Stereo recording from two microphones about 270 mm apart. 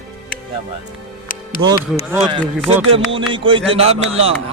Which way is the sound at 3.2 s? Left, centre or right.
Centre.